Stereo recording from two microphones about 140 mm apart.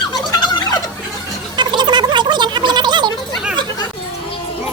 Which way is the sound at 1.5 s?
35° right (ahead or behind).